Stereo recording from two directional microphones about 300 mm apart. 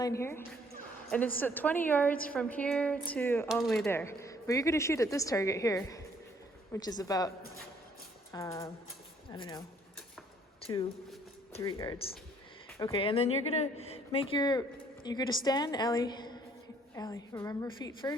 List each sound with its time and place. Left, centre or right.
0.0 s a woman's voice: centre
8.3 s speech: centre
10.6 s a sound: centre
11.5 s speech: centre